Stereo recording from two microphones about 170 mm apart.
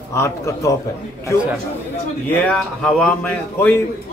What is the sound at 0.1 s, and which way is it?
Speech, 20° left (ahead or behind).